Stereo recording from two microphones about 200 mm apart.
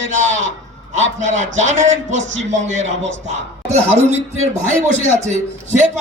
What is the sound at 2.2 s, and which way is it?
Speech, 70° right (ahead or behind).